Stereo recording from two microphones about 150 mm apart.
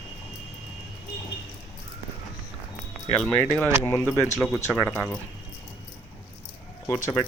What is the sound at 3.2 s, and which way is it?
Speech, 10° left (ahead or behind).